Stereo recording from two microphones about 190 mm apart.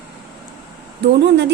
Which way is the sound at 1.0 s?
65° right (ahead or behind).